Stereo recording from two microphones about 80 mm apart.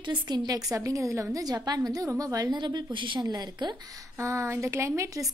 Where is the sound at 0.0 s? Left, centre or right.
Right.